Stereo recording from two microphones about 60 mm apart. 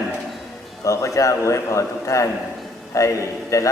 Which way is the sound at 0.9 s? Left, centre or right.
Left.